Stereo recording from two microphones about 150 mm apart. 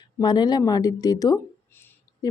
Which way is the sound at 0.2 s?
30° left (ahead or behind).